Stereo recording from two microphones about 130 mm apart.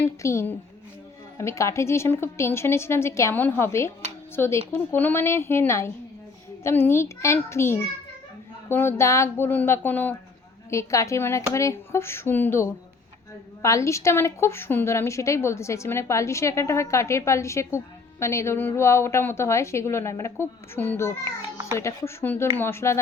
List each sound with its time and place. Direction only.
0.0 s a woman's voice: 20° left (ahead or behind)